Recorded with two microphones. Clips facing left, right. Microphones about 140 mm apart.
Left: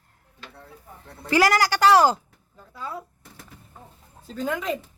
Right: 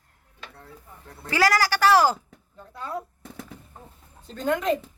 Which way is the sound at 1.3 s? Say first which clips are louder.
Left 2 dB; 20° left (ahead or behind).